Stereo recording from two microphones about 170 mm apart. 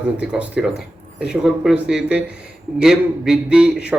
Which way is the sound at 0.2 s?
5° right (ahead or behind).